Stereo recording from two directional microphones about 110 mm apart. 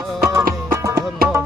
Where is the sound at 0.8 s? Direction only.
25° right (ahead or behind).